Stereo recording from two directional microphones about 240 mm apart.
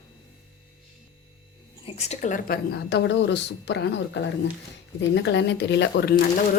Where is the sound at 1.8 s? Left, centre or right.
Left.